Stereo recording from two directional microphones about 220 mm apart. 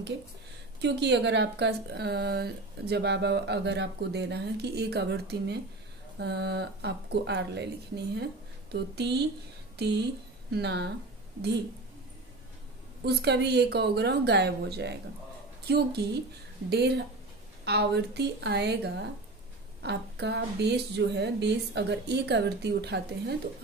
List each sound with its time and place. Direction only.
0.7 s speech: 50° right (ahead or behind)
13.0 s speech: 50° right (ahead or behind)